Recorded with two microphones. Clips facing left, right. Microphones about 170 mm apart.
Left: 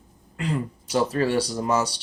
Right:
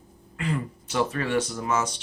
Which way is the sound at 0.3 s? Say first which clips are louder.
Left 2 dB; 35° left (ahead or behind).